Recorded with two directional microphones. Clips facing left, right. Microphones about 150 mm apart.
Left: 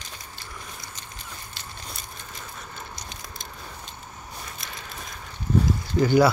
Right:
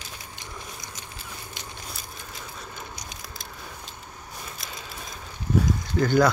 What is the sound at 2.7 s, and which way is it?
Keys jangling, 10° right (ahead or behind).